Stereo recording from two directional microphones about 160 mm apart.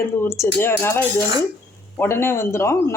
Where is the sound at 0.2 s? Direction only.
15° left (ahead or behind).